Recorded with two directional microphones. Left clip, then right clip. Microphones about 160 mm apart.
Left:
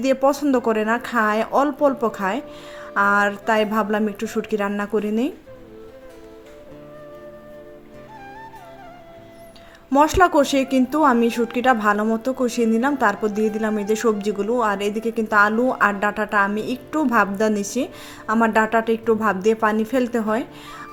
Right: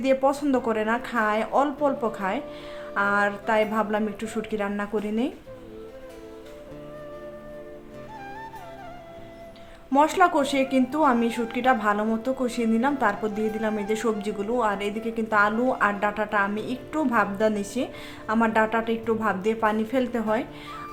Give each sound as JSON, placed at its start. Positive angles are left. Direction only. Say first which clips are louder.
{"t": 0.0, "sound": "speech", "louder": "left 4 dB", "side_deg": 30}
{"t": 9.9, "sound": "speech", "louder": "left 4 dB", "side_deg": 35}